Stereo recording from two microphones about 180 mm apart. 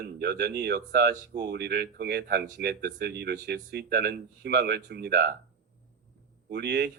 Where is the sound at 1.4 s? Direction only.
65° right (ahead or behind).